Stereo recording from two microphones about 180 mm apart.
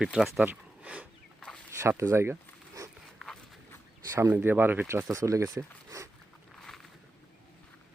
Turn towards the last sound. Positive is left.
turn(degrees=-20)  # may be behind; listen again after turning